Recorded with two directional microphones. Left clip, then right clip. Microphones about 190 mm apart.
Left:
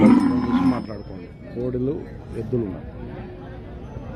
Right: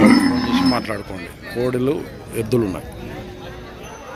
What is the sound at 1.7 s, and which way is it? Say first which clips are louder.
Speech: right 5 dB; 5° right (ahead or behind).